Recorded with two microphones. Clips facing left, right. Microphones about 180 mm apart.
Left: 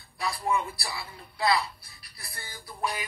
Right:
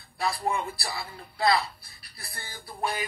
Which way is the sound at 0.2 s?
35° right (ahead or behind).